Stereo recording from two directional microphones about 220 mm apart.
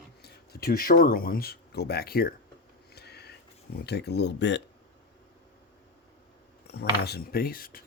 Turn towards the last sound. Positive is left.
turn(degrees=40)  # may be behind; listen again after turning